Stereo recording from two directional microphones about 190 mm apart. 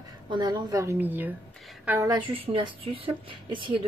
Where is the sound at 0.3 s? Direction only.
20° right (ahead or behind).